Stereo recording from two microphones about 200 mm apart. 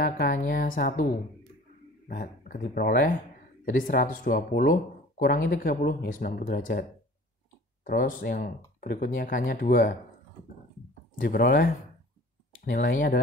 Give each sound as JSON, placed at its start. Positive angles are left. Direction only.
{"t": 0.0, "sound": "speech", "side_deg": 45}
{"t": 11.1, "sound": "speech", "side_deg": 45}